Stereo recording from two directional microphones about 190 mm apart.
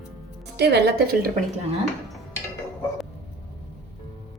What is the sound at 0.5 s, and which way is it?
Speech, 60° right (ahead or behind).